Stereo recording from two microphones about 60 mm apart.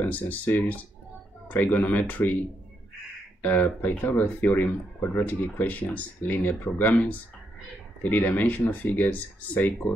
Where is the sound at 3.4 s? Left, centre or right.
Left.